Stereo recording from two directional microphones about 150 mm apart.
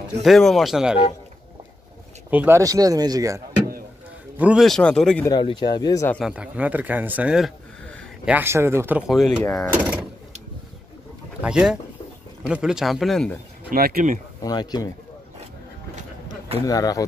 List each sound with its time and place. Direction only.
0.2 s speech: centre (ahead or behind)
2.3 s speech: 15° right (ahead or behind)
4.4 s speech: 10° right (ahead or behind)
4.6 s speech: 5° left (ahead or behind)
5.4 s speech: 30° left (ahead or behind)
6.2 s speech: 10° right (ahead or behind)
11.4 s speech: 5° right (ahead or behind)
13.7 s speech: 75° right (ahead or behind)
14.4 s speech: 25° left (ahead or behind)
16.6 s speech: 25° left (ahead or behind)